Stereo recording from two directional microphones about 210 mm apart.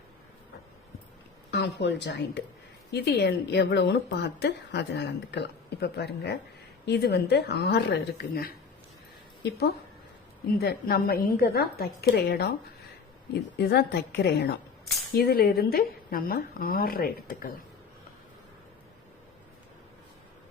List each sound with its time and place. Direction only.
1.5 s speech: 55° left (ahead or behind)